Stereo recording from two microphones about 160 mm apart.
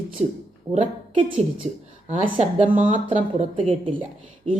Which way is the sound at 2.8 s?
35° right (ahead or behind).